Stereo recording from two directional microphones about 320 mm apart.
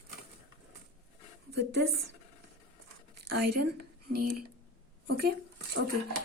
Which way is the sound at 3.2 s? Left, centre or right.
Right.